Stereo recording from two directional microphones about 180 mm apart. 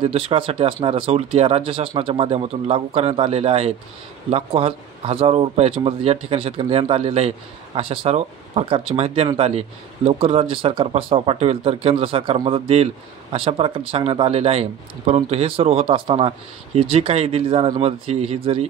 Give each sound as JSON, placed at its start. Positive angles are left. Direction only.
{"t": 0.0, "sound": "speech", "side_deg": -30}